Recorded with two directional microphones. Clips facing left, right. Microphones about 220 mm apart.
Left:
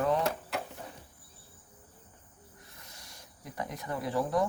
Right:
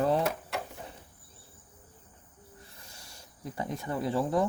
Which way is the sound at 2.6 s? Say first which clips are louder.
Right 1 dB; 30° right (ahead or behind).